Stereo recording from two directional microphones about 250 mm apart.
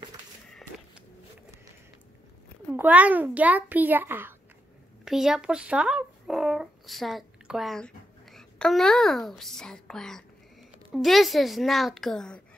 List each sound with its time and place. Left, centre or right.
2.7 s a child's voice: centre